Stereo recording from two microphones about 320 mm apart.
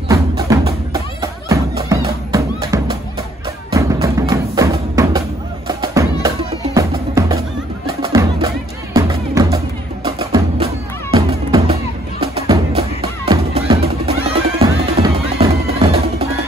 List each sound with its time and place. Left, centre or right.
0.1 s music: centre